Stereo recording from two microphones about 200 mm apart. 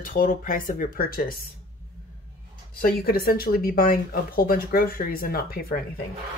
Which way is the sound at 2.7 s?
50° left (ahead or behind).